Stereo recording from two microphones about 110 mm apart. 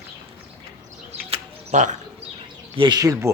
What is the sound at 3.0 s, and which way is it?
Speech, 30° right (ahead or behind).